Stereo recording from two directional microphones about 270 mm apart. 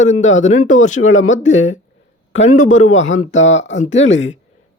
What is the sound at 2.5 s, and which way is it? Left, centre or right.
Speech, left.